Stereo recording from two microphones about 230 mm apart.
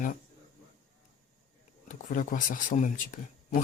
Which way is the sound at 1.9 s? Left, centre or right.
Left.